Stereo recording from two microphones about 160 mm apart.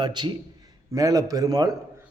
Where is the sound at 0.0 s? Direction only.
30° right (ahead or behind).